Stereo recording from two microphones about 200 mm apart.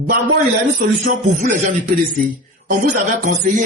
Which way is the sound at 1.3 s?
40° right (ahead or behind).